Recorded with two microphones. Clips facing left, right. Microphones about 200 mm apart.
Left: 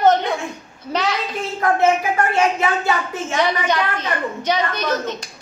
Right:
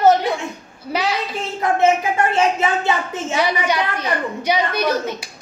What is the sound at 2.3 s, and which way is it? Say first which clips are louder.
Speech: even; 25° right (ahead or behind).